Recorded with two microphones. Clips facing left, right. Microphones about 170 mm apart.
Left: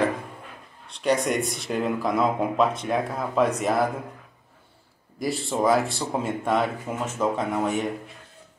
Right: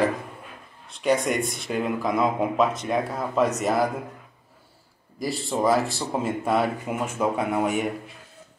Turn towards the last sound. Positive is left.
turn(degrees=-10)  # may be behind; listen again after turning